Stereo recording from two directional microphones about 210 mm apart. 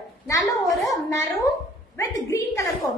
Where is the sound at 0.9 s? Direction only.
15° left (ahead or behind).